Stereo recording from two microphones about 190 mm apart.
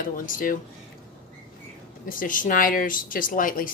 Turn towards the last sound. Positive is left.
turn(degrees=45)  # may be behind; listen again after turning